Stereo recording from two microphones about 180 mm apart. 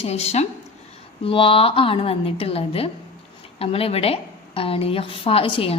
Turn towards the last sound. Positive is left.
turn(degrees=30)  # may be behind; listen again after turning